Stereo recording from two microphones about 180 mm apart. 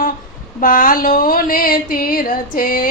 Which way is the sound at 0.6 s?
50° left (ahead or behind).